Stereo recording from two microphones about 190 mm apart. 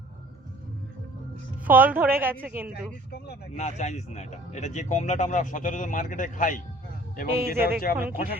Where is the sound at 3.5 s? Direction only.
35° left (ahead or behind).